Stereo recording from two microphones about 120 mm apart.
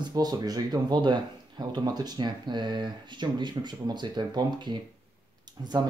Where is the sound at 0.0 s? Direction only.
35° right (ahead or behind).